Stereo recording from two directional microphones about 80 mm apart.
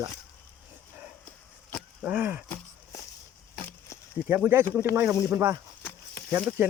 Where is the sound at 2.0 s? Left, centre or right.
Right.